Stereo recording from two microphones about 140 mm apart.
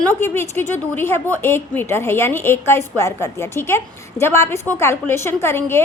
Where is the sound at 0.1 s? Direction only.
15° left (ahead or behind).